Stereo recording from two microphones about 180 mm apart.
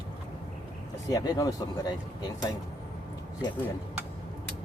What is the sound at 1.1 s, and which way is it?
Speech, 20° left (ahead or behind).